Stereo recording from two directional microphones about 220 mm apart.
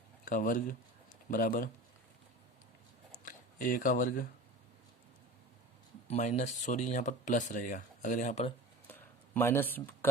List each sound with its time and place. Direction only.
0.3 s speech: 35° left (ahead or behind)
3.2 s speech: 35° left (ahead or behind)
6.1 s speech: 35° left (ahead or behind)
8.9 s a sound: 10° left (ahead or behind)